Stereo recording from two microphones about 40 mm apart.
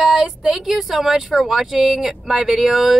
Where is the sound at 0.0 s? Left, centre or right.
Centre.